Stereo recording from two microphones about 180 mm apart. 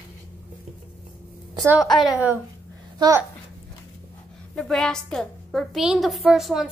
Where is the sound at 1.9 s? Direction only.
25° left (ahead or behind).